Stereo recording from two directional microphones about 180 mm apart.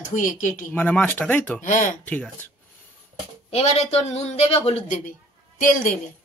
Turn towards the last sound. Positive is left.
turn(degrees=45)  # may be behind; listen again after turning